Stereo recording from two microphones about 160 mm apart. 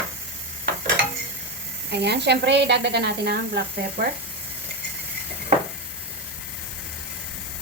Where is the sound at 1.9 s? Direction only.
90° right.